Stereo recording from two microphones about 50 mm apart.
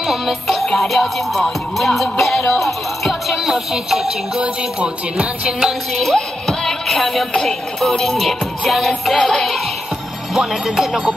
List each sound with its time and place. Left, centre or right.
0.0 s music: centre
4.4 s music: right
5.9 s music: centre
10.3 s speech: centre